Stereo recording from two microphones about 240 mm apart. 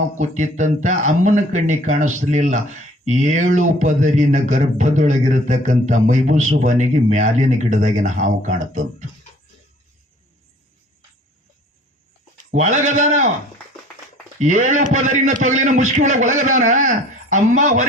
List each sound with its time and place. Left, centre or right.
0.2 s speech: right
12.5 s speech: right
14.3 s speech: right